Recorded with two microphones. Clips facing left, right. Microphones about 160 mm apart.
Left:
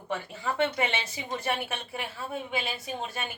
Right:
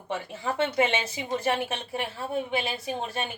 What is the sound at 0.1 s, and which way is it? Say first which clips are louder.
Speech: right 1 dB; 25° right (ahead or behind).